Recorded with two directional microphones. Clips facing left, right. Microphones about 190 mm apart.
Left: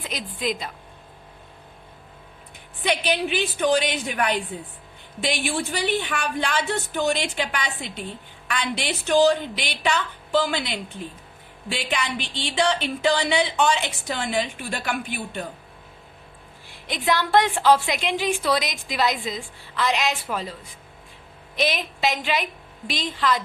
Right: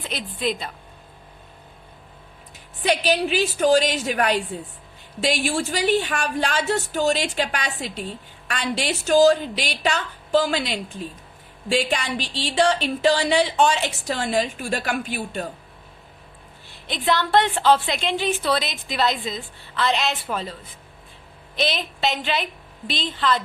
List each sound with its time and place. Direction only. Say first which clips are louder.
0.1 s a woman's voice: right 2 dB; 10° left (ahead or behind)
2.8 s speech: right 3 dB; 35° right (ahead or behind)
5.4 s speech: right 2 dB; 35° right (ahead or behind)
16.9 s a woman's voice: even; 10° left (ahead or behind)
21.6 s a woman's voice: even; 10° left (ahead or behind)